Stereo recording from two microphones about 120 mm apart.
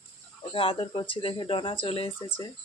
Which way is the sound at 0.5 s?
50° left (ahead or behind).